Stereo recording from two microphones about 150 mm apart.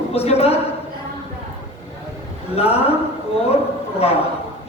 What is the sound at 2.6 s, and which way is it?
Speech, 40° left (ahead or behind).